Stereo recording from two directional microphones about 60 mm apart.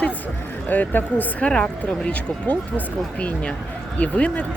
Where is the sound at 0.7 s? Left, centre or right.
Left.